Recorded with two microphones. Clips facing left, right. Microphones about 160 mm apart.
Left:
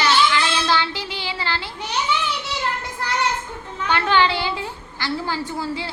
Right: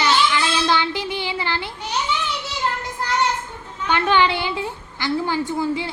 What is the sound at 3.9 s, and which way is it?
A woman's voice, 20° right (ahead or behind).